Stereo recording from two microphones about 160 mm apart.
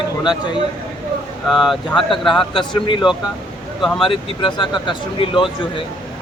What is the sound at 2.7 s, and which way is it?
Speech, 30° left (ahead or behind).